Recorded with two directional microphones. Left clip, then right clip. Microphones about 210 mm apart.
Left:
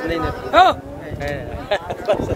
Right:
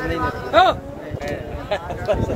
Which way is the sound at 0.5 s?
55° left (ahead or behind).